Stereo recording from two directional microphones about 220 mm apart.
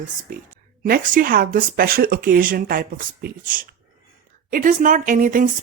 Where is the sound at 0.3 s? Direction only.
40° right (ahead or behind).